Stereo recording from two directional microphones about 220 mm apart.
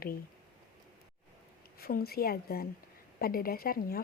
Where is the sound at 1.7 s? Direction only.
45° left (ahead or behind).